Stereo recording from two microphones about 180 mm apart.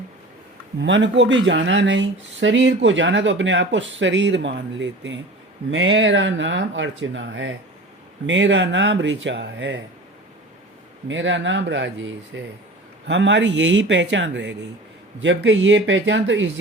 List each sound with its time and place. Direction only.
0.8 s speech: 85° right
11.1 s speech: 90° right
13.1 s speech: 80° right